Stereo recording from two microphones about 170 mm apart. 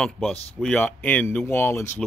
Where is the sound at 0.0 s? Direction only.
5° left (ahead or behind).